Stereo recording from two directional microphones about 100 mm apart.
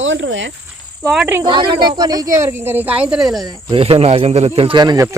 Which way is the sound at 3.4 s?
45° right (ahead or behind).